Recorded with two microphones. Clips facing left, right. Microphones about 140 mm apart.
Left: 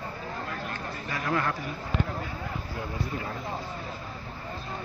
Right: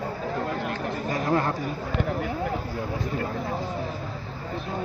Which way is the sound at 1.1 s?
35° right (ahead or behind).